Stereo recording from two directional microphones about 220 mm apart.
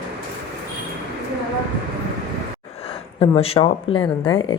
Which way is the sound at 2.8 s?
25° left (ahead or behind).